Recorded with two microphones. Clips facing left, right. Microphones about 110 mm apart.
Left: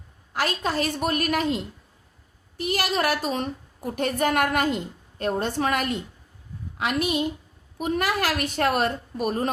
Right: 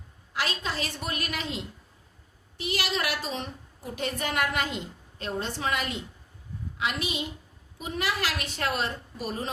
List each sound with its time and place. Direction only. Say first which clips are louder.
0.3 s a woman's voice: left 6 dB; 50° left (ahead or behind)